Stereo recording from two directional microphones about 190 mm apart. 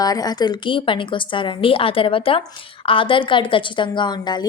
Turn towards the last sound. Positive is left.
turn(degrees=25)  # may be behind; listen again after turning